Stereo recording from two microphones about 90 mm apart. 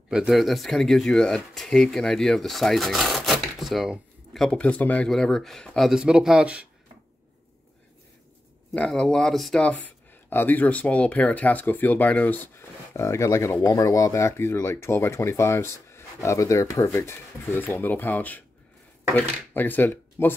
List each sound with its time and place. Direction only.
0.1 s speech: 5° right (ahead or behind)
5.9 s speech: 10° right (ahead or behind)
8.7 s speech: 10° left (ahead or behind)
9.6 s speech: 15° left (ahead or behind)
12.9 s speech: 35° left (ahead or behind)